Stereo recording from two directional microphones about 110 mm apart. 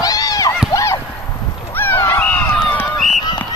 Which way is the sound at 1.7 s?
20° left (ahead or behind).